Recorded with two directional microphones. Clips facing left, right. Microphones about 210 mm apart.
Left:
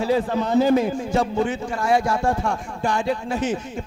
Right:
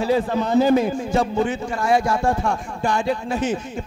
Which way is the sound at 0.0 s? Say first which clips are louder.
Right 1 dB; 20° right (ahead or behind).